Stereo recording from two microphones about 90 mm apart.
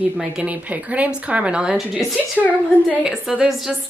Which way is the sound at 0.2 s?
15° right (ahead or behind).